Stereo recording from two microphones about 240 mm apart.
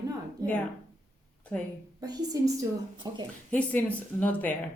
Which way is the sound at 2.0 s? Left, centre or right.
Centre.